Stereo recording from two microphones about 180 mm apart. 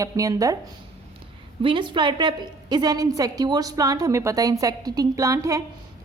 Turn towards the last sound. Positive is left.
turn(degrees=-15)  # may be behind; listen again after turning